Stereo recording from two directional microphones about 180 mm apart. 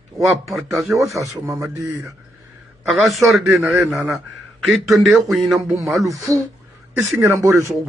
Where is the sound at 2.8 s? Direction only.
Centre (ahead or behind).